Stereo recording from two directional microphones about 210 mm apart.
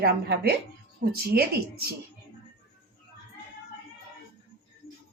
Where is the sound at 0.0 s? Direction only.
50° right (ahead or behind).